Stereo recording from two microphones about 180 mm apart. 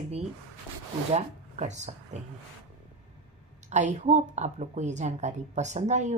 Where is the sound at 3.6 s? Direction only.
40° right (ahead or behind).